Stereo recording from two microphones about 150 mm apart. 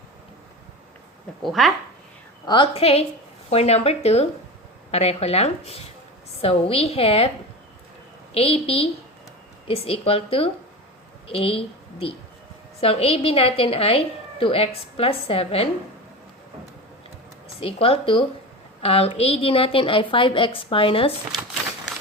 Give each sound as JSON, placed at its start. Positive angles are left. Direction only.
{"t": 1.4, "sound": "speech", "side_deg": 0}
{"t": 2.5, "sound": "a woman's voice", "side_deg": 35}
{"t": 8.3, "sound": "a woman's voice", "side_deg": 40}
{"t": 17.6, "sound": "a woman's voice", "side_deg": 40}